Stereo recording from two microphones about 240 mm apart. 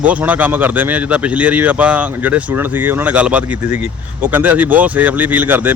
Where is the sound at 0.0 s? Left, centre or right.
Centre.